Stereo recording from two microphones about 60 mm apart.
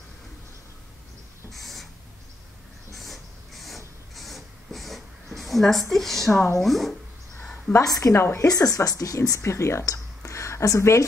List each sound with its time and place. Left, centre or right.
1.5 s owl: centre
2.9 s a sound: centre
6.3 s a woman's voice: left
6.6 s speech: centre
7.8 s a woman's voice: left
8.1 s a woman's voice: left
8.5 s speech: left
9.4 s speech: left